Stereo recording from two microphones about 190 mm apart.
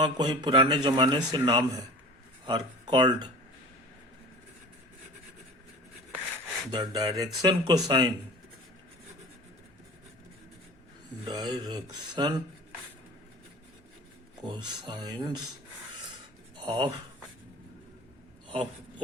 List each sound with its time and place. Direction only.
0.0 s speech: 25° right (ahead or behind)
6.7 s speech: 20° right (ahead or behind)
11.3 s speech: 20° right (ahead or behind)
14.4 s speech: 25° right (ahead or behind)
16.6 s speech: 25° right (ahead or behind)
18.4 s a sound: 25° right (ahead or behind)